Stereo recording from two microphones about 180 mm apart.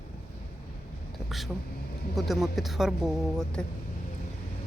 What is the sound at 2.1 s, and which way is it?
Speech, centre (ahead or behind).